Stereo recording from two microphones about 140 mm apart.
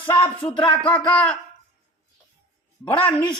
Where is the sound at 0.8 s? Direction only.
10° left (ahead or behind).